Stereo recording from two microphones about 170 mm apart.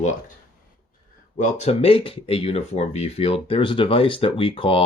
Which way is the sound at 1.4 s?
45° left (ahead or behind).